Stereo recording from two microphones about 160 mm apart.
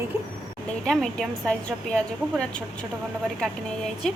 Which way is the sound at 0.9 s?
Centre (ahead or behind).